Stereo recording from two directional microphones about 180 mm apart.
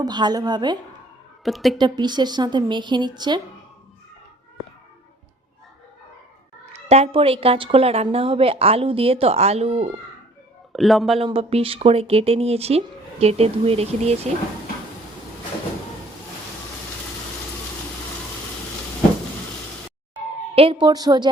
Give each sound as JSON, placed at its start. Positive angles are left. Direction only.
{"t": 0.0, "sound": "speech", "side_deg": -25}
{"t": 1.5, "sound": "a woman's voice", "side_deg": 0}
{"t": 1.8, "sound": "speech", "side_deg": -25}
{"t": 6.8, "sound": "a woman's voice", "side_deg": -35}
{"t": 10.7, "sound": "a man's voice", "side_deg": 0}
{"t": 11.2, "sound": "a woman's voice", "side_deg": -30}
{"t": 20.6, "sound": "speech", "side_deg": -30}